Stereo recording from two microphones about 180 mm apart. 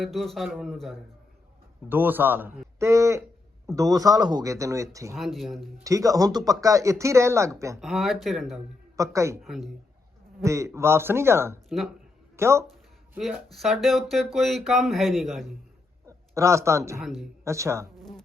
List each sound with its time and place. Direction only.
0.0 s speech: centre (ahead or behind)
1.9 s speech: 10° right (ahead or behind)
5.1 s speech: centre (ahead or behind)
5.8 s speech: 20° right (ahead or behind)
7.8 s speech: centre (ahead or behind)
9.0 s speech: 15° right (ahead or behind)
9.4 s speech: centre (ahead or behind)
10.4 s speech: 15° right (ahead or behind)
13.1 s speech: centre (ahead or behind)
16.0 s a man's voice: 15° right (ahead or behind)
17.0 s speech: centre (ahead or behind)
17.4 s speech: 15° right (ahead or behind)